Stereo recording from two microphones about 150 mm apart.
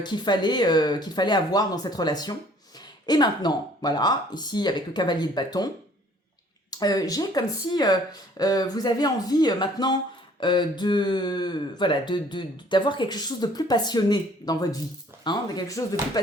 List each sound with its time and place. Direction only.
0.0 s speech: 30° left (ahead or behind)